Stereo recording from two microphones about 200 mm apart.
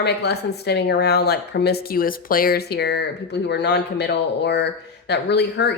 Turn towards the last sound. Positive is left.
turn(degrees=55)  # may be behind; listen again after turning